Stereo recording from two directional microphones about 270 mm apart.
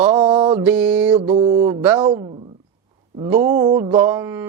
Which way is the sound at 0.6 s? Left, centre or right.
Centre.